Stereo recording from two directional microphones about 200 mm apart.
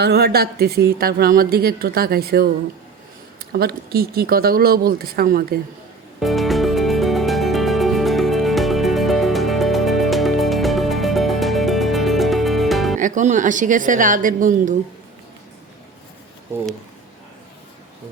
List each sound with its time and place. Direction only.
0.0 s a woman's voice: 55° right (ahead or behind)
3.5 s a woman's voice: 50° right (ahead or behind)
6.1 s music: centre (ahead or behind)
13.0 s a woman's voice: 40° right (ahead or behind)